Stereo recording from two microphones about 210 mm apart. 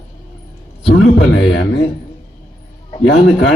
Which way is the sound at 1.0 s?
55° left (ahead or behind).